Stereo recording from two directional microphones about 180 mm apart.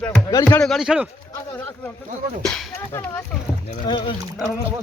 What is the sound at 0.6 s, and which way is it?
Speech, centre (ahead or behind).